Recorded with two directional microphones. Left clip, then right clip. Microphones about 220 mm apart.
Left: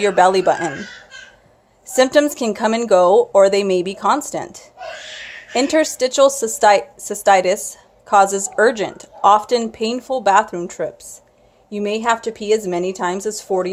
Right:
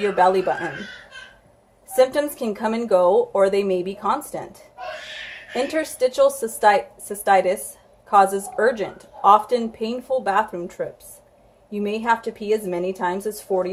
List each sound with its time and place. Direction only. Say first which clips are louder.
0.0 s speech: left 5 dB; 40° left (ahead or behind)
2.0 s a woman's voice: left 5 dB; 40° left (ahead or behind)